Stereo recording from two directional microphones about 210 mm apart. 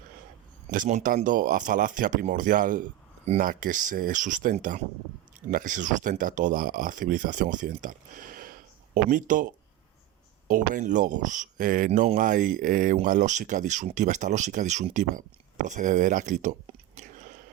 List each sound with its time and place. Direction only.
0.7 s speech: 35° right (ahead or behind)
10.5 s speech: 40° right (ahead or behind)